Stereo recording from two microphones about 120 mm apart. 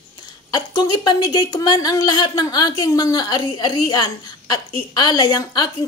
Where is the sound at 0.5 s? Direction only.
35° left (ahead or behind).